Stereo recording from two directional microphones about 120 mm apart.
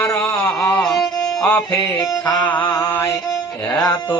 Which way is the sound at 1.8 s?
30° left (ahead or behind).